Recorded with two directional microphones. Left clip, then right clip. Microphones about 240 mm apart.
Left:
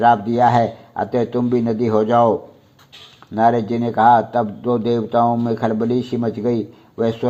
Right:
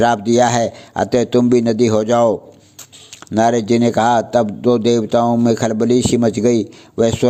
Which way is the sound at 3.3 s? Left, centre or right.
Right.